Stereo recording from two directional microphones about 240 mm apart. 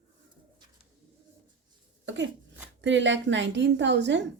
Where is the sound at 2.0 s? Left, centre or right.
Right.